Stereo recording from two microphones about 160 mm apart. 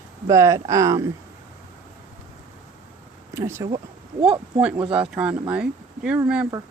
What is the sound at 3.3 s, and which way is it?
Speech, 15° right (ahead or behind).